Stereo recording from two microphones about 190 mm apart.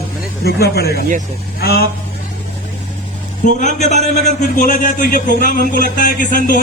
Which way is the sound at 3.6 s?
35° left (ahead or behind).